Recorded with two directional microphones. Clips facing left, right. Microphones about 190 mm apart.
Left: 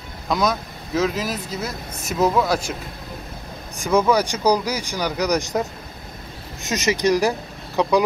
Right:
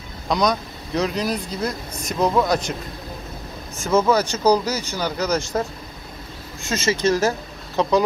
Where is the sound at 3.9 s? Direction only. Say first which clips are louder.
Even; 15° left (ahead or behind).